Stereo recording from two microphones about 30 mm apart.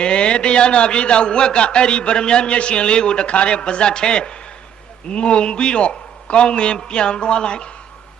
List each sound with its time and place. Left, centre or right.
0.0 s a man's voice: left